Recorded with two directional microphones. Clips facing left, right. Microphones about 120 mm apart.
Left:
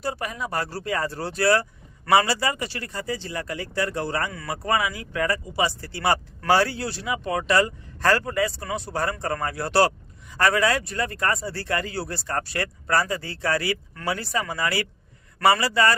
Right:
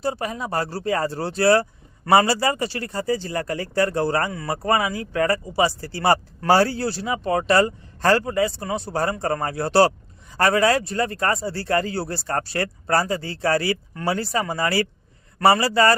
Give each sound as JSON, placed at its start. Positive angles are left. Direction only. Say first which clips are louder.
{"t": 0.0, "sound": "speech", "louder": "right 3 dB", "side_deg": -30}